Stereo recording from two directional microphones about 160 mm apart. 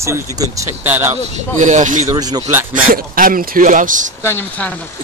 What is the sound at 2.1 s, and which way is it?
Speech, 25° right (ahead or behind).